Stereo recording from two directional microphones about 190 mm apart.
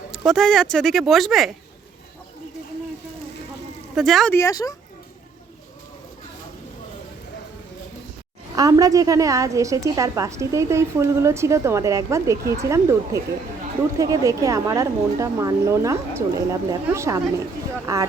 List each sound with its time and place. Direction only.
0.3 s speech: centre (ahead or behind)
3.9 s speech: centre (ahead or behind)
4.4 s speech: 15° left (ahead or behind)
8.5 s a woman's voice: 20° right (ahead or behind)